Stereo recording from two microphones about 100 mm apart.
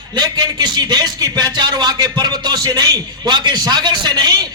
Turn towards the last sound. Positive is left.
turn(degrees=-40)  # may be behind; listen again after turning